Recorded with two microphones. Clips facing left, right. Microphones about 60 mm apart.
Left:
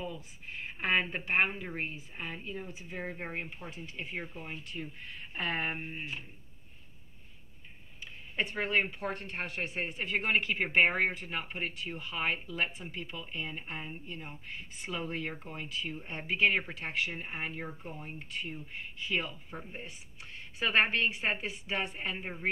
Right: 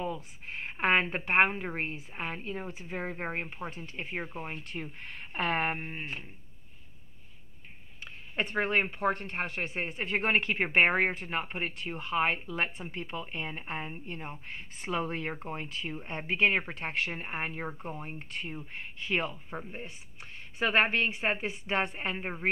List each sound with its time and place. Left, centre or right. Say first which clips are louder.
0.0 s a woman's voice: right 5 dB; right
8.0 s speech: right 1 dB; right